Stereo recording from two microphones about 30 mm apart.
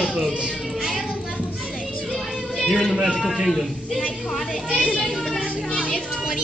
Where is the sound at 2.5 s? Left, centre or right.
Centre.